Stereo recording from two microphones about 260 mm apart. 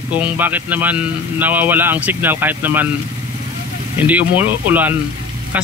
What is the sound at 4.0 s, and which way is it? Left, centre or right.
Speech, centre.